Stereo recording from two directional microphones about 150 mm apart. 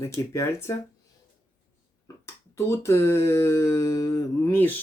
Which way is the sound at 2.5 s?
20° left (ahead or behind).